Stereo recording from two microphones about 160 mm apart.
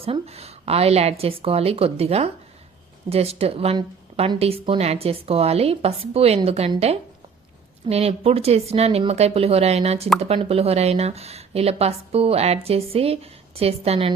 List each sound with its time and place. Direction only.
0.0 s a woman's voice: 35° right (ahead or behind)